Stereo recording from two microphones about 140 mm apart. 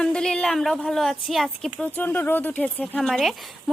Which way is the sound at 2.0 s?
15° left (ahead or behind).